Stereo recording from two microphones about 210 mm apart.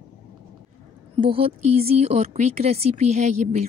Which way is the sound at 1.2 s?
25° right (ahead or behind).